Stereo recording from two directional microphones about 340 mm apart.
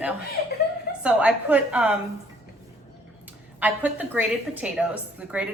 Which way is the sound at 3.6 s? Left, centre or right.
Centre.